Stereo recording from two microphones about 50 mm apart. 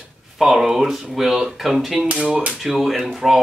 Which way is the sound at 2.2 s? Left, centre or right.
Centre.